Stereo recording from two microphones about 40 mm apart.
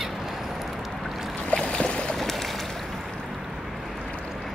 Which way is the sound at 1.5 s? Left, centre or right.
Left.